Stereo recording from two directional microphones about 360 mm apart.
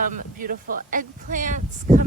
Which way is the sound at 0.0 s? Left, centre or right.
Right.